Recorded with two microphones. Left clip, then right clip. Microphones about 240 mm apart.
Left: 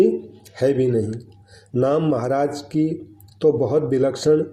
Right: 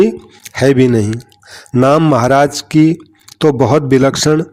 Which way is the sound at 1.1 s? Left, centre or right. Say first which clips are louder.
Right 10 dB; right.